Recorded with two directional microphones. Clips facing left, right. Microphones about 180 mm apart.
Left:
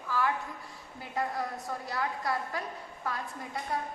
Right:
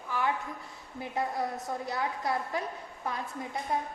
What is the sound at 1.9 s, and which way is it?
A woman's voice, 20° right (ahead or behind).